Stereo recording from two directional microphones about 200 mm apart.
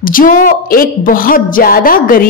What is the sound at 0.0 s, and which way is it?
A woman's voice, 45° left (ahead or behind).